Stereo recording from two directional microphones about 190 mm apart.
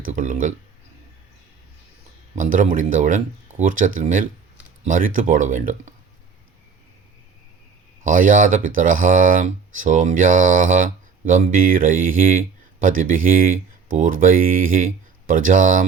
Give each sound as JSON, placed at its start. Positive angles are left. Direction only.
{"t": 0.0, "sound": "speech", "side_deg": -45}
{"t": 2.3, "sound": "speech", "side_deg": -45}
{"t": 8.0, "sound": "speech", "side_deg": -45}